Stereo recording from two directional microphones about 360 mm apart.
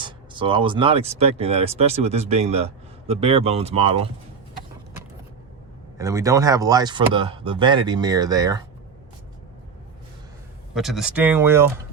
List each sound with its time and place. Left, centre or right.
0.0 s speech: centre
6.0 s speech: centre
10.8 s speech: centre